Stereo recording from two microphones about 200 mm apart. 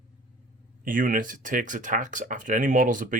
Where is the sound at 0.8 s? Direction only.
40° right (ahead or behind).